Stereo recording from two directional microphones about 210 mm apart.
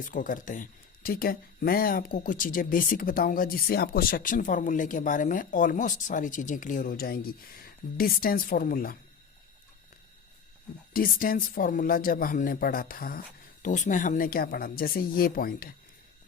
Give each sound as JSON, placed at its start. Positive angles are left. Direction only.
{"t": 0.0, "sound": "speech", "side_deg": 40}
{"t": 10.9, "sound": "speech", "side_deg": 45}